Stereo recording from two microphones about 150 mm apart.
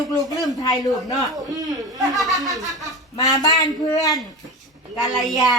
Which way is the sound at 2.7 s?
Centre (ahead or behind).